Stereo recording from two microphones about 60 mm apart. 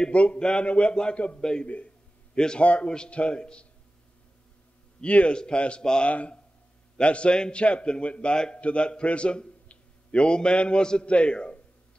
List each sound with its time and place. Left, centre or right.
0.0 s a man's voice: left
5.0 s a man's voice: centre